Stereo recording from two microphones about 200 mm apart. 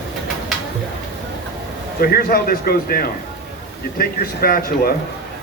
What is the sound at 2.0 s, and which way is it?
A man's voice, 50° left (ahead or behind).